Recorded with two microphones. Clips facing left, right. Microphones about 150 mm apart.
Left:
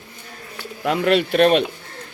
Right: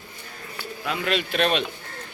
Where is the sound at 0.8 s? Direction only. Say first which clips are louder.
Left 8 dB; 55° left (ahead or behind).